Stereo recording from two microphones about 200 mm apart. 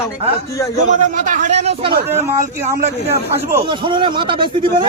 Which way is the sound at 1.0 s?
40° right (ahead or behind).